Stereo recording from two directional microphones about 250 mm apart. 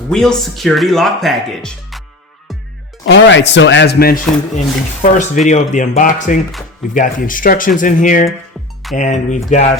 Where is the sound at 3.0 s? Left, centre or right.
Left.